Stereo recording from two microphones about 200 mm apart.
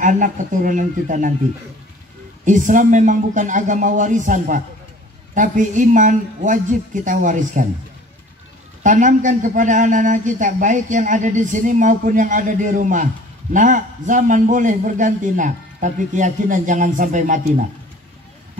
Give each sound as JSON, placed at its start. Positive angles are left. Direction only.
{"t": 0.0, "sound": "speech", "side_deg": -40}
{"t": 2.4, "sound": "speech", "side_deg": -40}
{"t": 8.8, "sound": "speech", "side_deg": -40}